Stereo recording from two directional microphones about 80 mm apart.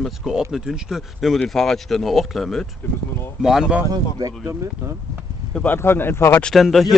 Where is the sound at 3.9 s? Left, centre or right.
Right.